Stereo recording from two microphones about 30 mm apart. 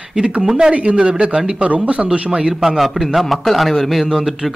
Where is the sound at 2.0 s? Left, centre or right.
Right.